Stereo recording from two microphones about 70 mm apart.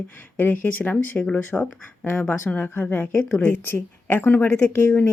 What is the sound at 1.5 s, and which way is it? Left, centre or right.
Speech, centre.